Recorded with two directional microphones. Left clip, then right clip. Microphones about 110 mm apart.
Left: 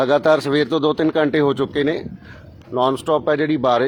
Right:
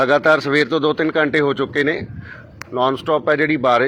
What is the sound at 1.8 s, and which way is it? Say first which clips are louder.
Speech: right 2 dB; 50° left (ahead or behind).